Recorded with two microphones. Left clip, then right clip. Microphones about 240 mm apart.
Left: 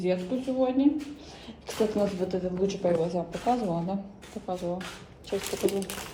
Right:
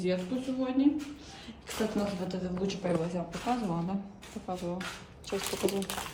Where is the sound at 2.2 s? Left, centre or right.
Centre.